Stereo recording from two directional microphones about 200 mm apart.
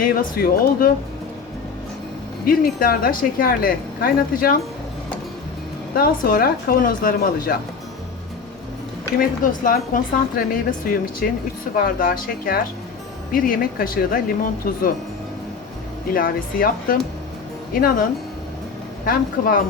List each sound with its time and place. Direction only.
0.0 s speech: 45° left (ahead or behind)
2.4 s speech: 45° left (ahead or behind)
6.0 s speech: 45° left (ahead or behind)
9.1 s speech: 45° left (ahead or behind)
16.1 s speech: 45° left (ahead or behind)
19.0 s speech: 45° left (ahead or behind)